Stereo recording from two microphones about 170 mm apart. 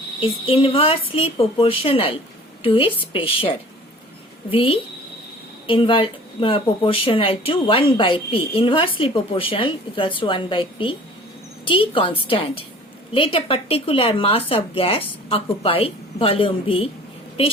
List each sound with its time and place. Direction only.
0.2 s speech: 30° left (ahead or behind)